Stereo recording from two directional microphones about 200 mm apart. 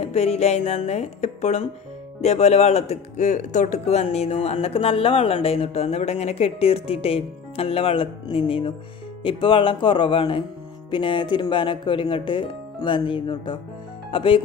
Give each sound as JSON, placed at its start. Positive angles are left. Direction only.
{"t": 0.0, "sound": "speech", "side_deg": 30}